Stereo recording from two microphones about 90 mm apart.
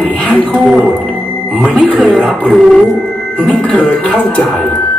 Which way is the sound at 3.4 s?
15° left (ahead or behind).